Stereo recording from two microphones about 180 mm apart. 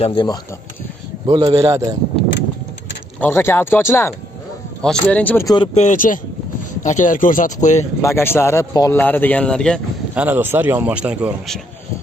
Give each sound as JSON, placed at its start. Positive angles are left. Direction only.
{"t": 0.0, "sound": "speech", "side_deg": 30}
{"t": 1.2, "sound": "speech", "side_deg": -25}
{"t": 3.2, "sound": "speech", "side_deg": 15}
{"t": 5.8, "sound": "speech", "side_deg": 45}
{"t": 8.0, "sound": "speech", "side_deg": 15}
{"t": 10.1, "sound": "speech", "side_deg": -10}